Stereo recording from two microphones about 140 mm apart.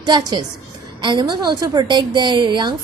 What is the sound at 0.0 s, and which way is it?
A woman's voice, 30° right (ahead or behind).